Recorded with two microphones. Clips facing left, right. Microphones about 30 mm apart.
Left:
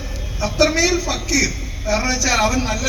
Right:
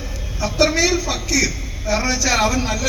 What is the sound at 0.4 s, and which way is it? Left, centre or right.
A man's voice, centre.